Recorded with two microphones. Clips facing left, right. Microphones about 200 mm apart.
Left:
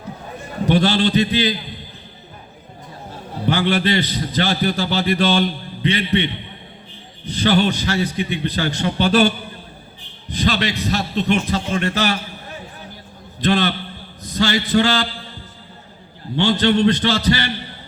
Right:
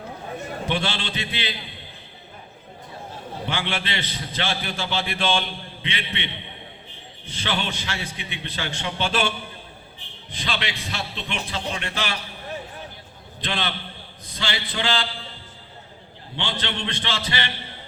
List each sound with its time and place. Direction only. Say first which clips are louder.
0.6 s a man's voice: left 12 dB; 40° left (ahead or behind)
3.4 s a man's voice: left 11 dB; 40° left (ahead or behind)
13.4 s a man's voice: left 11 dB; 45° left (ahead or behind)
16.3 s a man's voice: left 14 dB; 40° left (ahead or behind)